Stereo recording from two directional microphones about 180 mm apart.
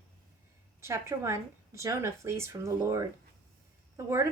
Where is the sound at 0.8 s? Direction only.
15° right (ahead or behind).